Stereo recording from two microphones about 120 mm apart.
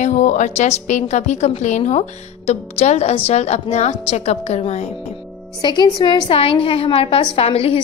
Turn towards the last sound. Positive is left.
turn(degrees=55)  # may be behind; listen again after turning